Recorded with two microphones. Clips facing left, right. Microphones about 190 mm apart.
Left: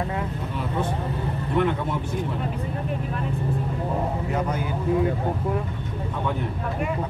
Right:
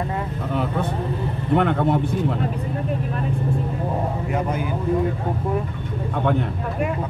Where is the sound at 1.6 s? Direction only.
65° right (ahead or behind).